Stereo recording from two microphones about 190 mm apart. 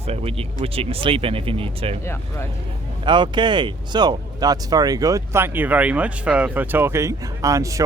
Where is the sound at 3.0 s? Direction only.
25° right (ahead or behind).